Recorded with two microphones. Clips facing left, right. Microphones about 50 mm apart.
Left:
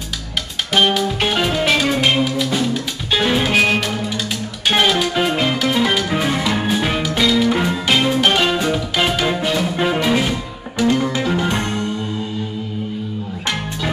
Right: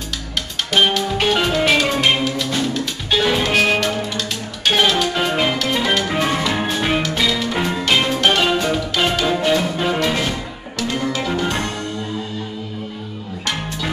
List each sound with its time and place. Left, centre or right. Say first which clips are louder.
0.7 s music: left 1 dB; centre
9.5 s music: right 2 dB; centre
9.8 s music: left 2 dB; centre